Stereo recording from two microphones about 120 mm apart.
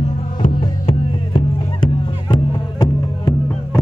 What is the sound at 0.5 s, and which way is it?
Music, 45° left (ahead or behind).